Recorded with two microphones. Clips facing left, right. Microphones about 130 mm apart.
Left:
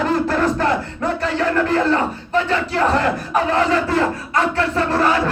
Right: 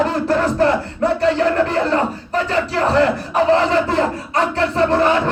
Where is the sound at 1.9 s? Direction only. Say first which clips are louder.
Even; 35° right (ahead or behind).